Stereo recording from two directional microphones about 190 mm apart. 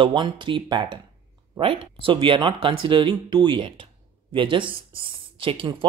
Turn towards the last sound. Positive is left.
turn(degrees=-25)  # may be behind; listen again after turning